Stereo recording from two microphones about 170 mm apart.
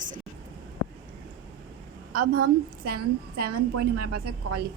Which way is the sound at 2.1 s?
55° right (ahead or behind).